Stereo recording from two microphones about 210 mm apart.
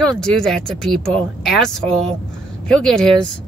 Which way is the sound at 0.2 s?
Centre (ahead or behind).